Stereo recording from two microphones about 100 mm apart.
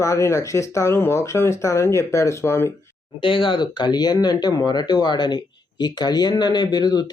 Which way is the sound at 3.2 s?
60° left (ahead or behind).